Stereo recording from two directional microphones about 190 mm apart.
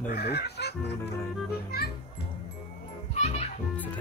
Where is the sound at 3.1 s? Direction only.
35° left (ahead or behind).